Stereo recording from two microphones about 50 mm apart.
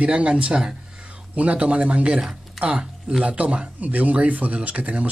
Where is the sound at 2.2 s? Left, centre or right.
Centre.